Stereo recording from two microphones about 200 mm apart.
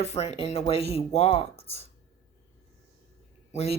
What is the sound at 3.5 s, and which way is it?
Speech, 30° left (ahead or behind).